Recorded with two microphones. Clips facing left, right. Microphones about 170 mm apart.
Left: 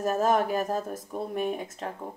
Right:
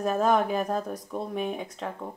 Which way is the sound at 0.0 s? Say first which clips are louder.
Right 1 dB; centre (ahead or behind).